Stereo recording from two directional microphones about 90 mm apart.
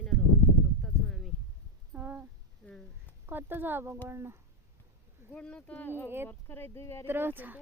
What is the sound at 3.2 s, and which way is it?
Speech, 20° right (ahead or behind).